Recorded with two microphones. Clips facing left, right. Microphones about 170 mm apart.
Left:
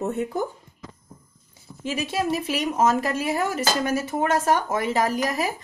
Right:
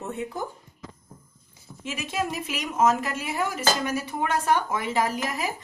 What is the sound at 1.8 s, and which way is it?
Speech, 35° left (ahead or behind).